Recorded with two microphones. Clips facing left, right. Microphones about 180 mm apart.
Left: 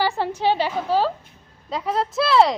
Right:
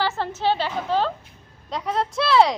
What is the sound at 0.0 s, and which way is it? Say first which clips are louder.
A woman's voice: left 2 dB; 15° left (ahead or behind).